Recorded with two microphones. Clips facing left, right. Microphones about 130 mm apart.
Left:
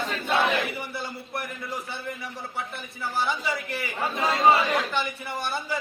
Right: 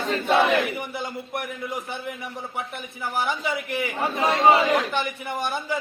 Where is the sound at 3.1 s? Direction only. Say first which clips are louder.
Right 2 dB; 15° right (ahead or behind).